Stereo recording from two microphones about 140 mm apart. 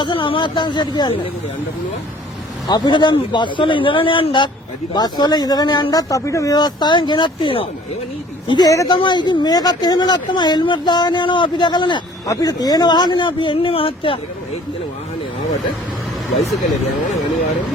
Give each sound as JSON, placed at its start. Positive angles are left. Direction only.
{"t": 0.0, "sound": "speech", "side_deg": 35}
{"t": 2.6, "sound": "speech", "side_deg": 30}